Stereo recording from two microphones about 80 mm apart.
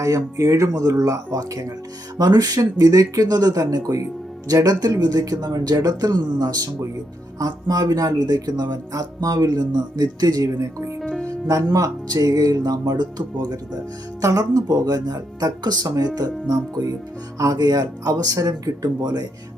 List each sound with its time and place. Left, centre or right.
0.0 s speech: right